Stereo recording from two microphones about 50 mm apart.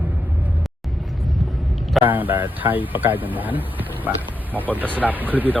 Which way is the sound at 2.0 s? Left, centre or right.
Right.